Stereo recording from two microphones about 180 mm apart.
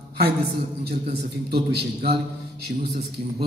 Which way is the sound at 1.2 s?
60° right (ahead or behind).